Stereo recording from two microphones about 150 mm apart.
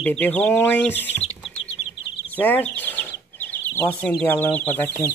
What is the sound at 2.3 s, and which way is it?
Speech, 10° left (ahead or behind).